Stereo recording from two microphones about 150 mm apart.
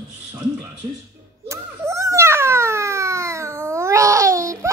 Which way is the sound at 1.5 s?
20° right (ahead or behind).